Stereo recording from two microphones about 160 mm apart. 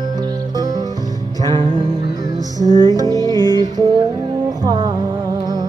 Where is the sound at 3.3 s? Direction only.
20° left (ahead or behind).